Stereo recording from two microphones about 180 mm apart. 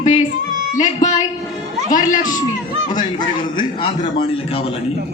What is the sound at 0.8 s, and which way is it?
A woman's voice, 40° left (ahead or behind).